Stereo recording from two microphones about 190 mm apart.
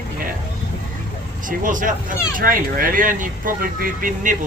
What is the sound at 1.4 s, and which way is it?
Speech, 45° right (ahead or behind).